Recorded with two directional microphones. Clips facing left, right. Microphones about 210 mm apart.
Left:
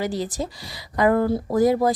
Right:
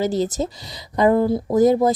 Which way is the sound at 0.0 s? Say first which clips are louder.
Right 5 dB; 25° right (ahead or behind).